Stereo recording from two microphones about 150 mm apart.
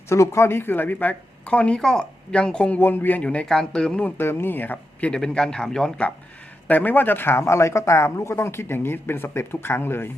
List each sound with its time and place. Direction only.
0.1 s speech: 20° left (ahead or behind)